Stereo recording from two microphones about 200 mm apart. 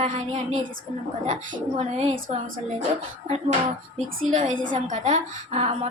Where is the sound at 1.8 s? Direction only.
30° right (ahead or behind).